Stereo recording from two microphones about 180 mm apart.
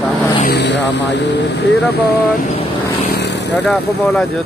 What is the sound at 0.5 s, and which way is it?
Speech, 75° left (ahead or behind).